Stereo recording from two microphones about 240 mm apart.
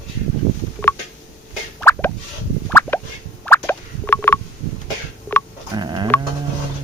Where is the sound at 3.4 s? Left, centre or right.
Centre.